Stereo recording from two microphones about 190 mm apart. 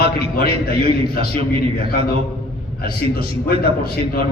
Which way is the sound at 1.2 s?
35° right (ahead or behind).